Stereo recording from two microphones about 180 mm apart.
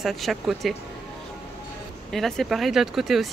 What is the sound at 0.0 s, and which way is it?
Speech, centre (ahead or behind).